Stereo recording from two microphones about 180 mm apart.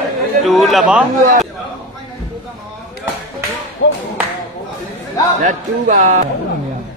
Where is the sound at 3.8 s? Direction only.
90° left.